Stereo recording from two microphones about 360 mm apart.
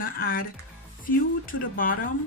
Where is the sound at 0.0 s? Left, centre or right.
Left.